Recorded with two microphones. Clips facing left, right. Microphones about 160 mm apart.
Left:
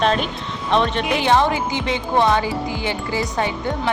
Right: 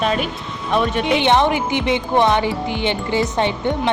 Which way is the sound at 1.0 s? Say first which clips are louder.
Right 2 dB; 25° right (ahead or behind).